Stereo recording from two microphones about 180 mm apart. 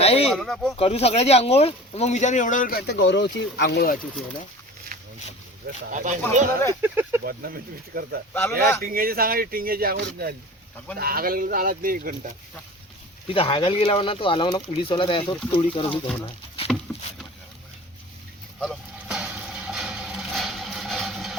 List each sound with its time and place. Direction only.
0.0 s a sound: 35° left (ahead or behind)
0.3 s speech: centre (ahead or behind)
0.8 s speech: 35° left (ahead or behind); by 3.9 s 65° left (ahead or behind)
4.9 s a sound: 55° right (ahead or behind)
5.9 s speech: 45° right (ahead or behind)
6.8 s speech: 10° right (ahead or behind)
7.3 s speech: 55° right (ahead or behind)
8.3 s speech: 10° left (ahead or behind)
8.8 s speech: 55° right (ahead or behind)
13.2 s speech: 30° left (ahead or behind)
18.6 s a sound: centre (ahead or behind)